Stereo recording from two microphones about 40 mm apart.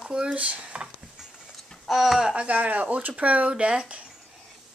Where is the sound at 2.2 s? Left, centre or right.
Right.